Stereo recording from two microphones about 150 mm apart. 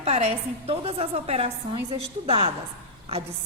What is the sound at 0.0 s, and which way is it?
A woman's voice, 45° right (ahead or behind).